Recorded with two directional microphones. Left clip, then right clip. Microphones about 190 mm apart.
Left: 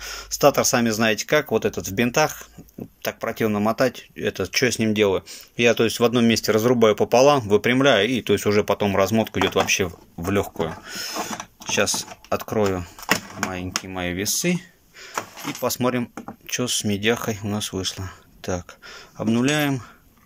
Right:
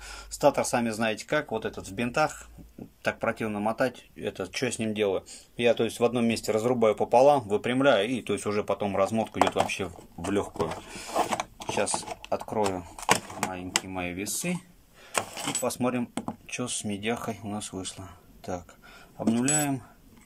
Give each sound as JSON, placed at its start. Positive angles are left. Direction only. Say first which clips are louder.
{"t": 0.0, "sound": "speech", "louder": "left 6 dB", "side_deg": 0}
{"t": 11.1, "sound": "a sound", "louder": "right 5 dB", "side_deg": -15}
{"t": 11.6, "sound": "speech", "louder": "left 11 dB", "side_deg": -5}
{"t": 13.0, "sound": "a sound", "louder": "left 1 dB", "side_deg": -15}
{"t": 13.8, "sound": "speech", "louder": "left 7 dB", "side_deg": -5}
{"t": 15.6, "sound": "speech", "louder": "left 7 dB", "side_deg": -10}